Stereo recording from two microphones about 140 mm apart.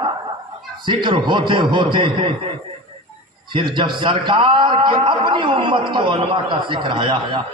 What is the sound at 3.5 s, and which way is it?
A man's voice, 35° right (ahead or behind).